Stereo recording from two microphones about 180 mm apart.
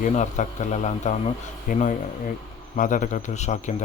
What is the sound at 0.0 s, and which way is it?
A man's voice, 40° left (ahead or behind).